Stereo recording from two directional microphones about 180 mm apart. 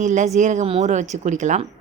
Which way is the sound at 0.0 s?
40° right (ahead or behind).